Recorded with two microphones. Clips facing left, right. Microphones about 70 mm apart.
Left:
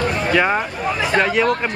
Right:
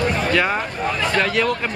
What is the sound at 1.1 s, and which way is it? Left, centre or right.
Speech, centre.